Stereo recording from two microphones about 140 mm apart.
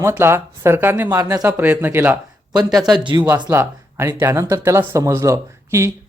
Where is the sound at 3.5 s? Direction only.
20° right (ahead or behind).